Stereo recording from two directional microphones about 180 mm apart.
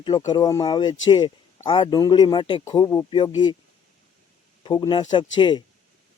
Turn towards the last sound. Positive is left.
turn(degrees=25)  # may be behind; listen again after turning